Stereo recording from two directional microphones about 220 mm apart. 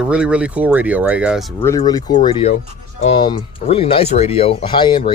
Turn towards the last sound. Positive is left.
turn(degrees=25)  # may be behind; listen again after turning